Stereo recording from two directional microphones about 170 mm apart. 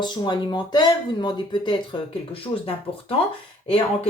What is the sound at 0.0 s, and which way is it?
Speech, 25° left (ahead or behind).